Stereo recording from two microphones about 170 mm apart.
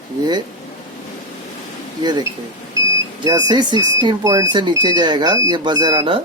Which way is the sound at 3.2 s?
25° right (ahead or behind).